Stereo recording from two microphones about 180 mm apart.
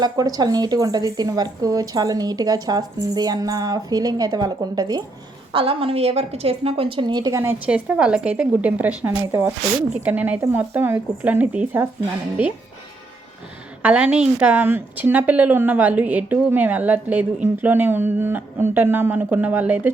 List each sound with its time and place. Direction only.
0.0 s a woman's voice: 20° right (ahead or behind)
13.8 s a woman's voice: 5° right (ahead or behind)